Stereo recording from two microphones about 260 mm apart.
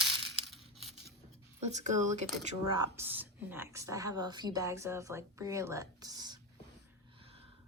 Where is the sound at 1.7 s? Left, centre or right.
Right.